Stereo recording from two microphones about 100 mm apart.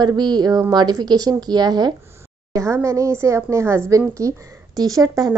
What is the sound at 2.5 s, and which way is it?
A woman's voice, 30° right (ahead or behind).